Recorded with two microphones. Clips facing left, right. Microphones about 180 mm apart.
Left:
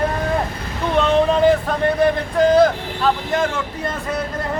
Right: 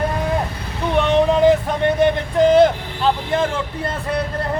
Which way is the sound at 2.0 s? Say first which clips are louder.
Right 1 dB; 25° right (ahead or behind).